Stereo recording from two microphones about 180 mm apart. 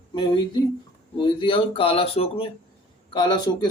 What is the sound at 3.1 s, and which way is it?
Speech, 25° left (ahead or behind).